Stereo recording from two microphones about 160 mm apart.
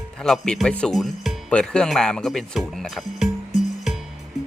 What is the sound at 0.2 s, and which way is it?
Speech, 5° left (ahead or behind).